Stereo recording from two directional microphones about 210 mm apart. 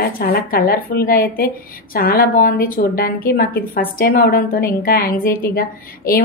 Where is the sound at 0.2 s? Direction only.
45° left (ahead or behind).